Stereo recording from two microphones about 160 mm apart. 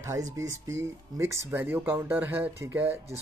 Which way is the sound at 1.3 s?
15° right (ahead or behind).